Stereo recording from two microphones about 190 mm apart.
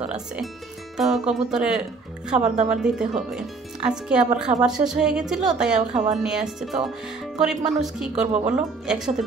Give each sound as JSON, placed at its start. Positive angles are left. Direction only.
{"t": 0.0, "sound": "music", "side_deg": -5}
{"t": 0.9, "sound": "speech", "side_deg": 0}
{"t": 2.5, "sound": "a woman's voice", "side_deg": -35}
{"t": 3.2, "sound": "speech", "side_deg": -5}